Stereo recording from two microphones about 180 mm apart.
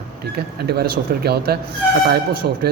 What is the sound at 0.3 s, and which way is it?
Speech, 60° right (ahead or behind).